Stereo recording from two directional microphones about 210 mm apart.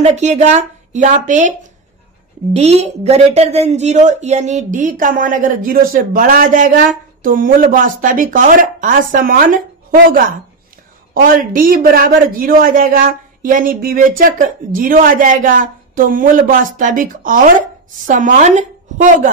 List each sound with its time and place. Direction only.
0.1 s speech: 35° right (ahead or behind)
2.5 s speech: 30° right (ahead or behind)
11.5 s speech: 40° right (ahead or behind)